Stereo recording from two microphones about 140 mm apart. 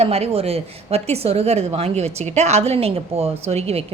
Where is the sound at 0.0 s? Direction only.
45° right (ahead or behind).